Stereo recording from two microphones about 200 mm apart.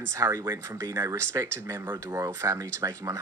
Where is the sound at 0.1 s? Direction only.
15° right (ahead or behind).